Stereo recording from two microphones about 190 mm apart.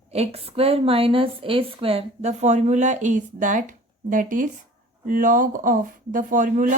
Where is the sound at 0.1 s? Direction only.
30° right (ahead or behind).